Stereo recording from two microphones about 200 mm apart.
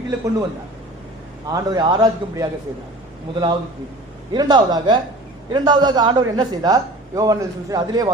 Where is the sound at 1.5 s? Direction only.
20° right (ahead or behind).